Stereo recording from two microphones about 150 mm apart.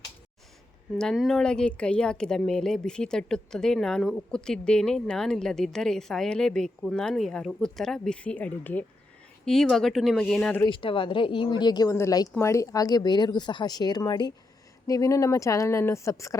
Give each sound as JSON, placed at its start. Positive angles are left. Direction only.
{"t": 0.9, "sound": "a woman's voice", "side_deg": 0}
{"t": 10.7, "sound": "speech", "side_deg": 35}